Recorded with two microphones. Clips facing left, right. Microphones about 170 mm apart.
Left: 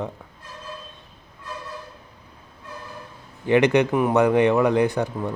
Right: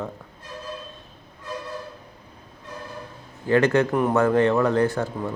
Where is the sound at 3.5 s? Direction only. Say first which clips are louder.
Left 1 dB; 15° left (ahead or behind).